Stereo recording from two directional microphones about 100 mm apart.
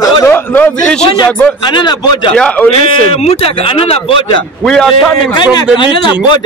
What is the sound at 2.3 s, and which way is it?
Speech, 15° left (ahead or behind).